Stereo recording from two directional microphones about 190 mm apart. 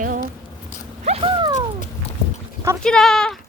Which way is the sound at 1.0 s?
25° right (ahead or behind).